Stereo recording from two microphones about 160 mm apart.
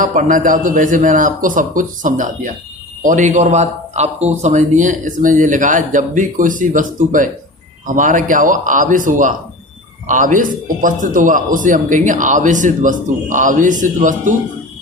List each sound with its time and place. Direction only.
0.0 s a man's voice: 55° right (ahead or behind)